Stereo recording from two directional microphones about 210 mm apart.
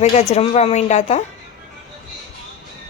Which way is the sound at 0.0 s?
30° left (ahead or behind).